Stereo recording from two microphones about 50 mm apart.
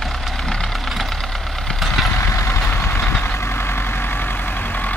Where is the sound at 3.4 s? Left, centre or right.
Left.